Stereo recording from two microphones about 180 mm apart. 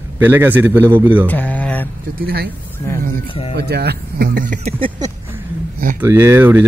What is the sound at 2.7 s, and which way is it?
Speech, 15° left (ahead or behind).